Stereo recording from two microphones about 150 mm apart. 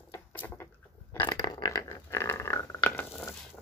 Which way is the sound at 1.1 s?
25° left (ahead or behind).